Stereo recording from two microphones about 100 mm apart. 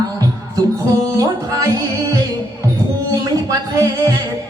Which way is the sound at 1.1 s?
35° right (ahead or behind).